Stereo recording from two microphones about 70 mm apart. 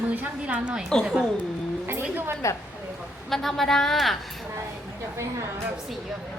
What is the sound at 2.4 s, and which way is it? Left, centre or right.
Speech, left.